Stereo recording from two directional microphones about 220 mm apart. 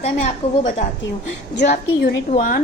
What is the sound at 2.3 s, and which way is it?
Speech, 35° left (ahead or behind).